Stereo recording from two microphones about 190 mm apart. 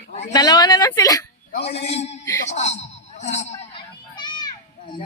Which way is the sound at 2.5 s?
35° left (ahead or behind).